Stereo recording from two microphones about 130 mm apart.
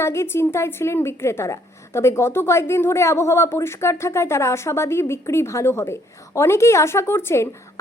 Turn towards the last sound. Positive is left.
turn(degrees=20)  # may be behind; listen again after turning